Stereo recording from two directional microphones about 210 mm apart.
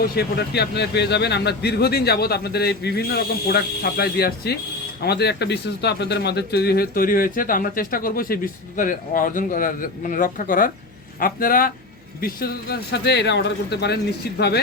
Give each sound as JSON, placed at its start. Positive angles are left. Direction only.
{"t": 0.0, "sound": "speech", "side_deg": 50}